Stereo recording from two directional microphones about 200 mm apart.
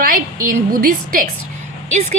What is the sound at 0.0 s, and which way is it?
A woman's voice, 45° right (ahead or behind).